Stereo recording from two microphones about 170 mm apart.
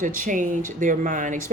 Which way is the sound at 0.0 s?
50° right (ahead or behind).